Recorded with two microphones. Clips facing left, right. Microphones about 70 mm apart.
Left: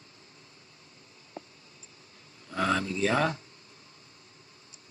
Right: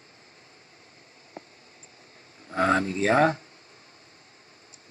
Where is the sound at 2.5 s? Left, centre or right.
Right.